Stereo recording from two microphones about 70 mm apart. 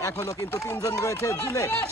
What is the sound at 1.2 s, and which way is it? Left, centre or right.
Speech, left.